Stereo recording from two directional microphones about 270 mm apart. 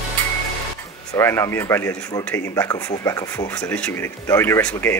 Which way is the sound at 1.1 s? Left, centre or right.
Centre.